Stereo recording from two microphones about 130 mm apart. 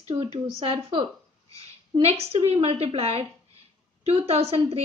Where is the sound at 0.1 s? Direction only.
45° right (ahead or behind).